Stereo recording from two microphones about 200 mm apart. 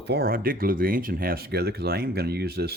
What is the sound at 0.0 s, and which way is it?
Speech, 55° right (ahead or behind).